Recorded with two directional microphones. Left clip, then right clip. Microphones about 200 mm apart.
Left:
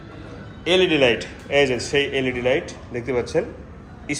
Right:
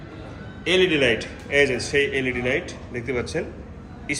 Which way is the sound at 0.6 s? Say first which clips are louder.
Left 2 dB; 15° left (ahead or behind).